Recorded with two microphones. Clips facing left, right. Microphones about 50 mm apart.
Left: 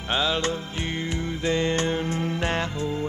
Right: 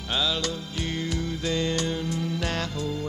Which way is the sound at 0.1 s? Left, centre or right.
Left.